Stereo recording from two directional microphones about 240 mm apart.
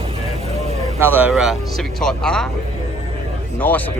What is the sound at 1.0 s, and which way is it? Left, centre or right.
Speech, centre.